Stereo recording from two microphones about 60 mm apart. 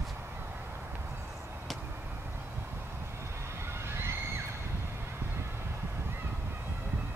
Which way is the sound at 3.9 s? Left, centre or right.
Right.